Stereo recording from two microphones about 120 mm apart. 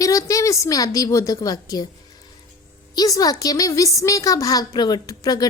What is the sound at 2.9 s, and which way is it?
A woman's voice, 35° left (ahead or behind).